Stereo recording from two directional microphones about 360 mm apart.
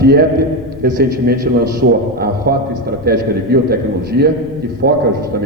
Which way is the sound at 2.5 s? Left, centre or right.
Right.